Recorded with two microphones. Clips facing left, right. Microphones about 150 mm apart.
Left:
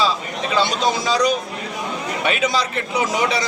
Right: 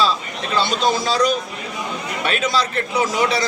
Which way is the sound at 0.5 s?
15° left (ahead or behind).